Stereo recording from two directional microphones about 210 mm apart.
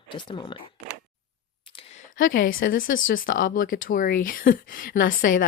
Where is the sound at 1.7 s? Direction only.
35° left (ahead or behind).